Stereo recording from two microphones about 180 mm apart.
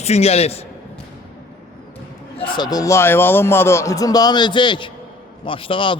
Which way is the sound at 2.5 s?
20° left (ahead or behind).